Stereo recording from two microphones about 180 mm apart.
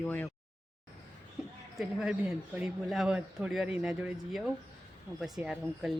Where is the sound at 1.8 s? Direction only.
Centre (ahead or behind).